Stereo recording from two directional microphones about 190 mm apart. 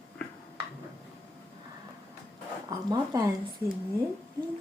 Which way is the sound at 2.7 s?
20° right (ahead or behind).